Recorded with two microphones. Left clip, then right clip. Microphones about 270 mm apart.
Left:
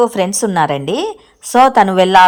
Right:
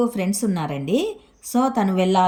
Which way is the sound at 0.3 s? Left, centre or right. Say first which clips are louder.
Left 12 dB; centre.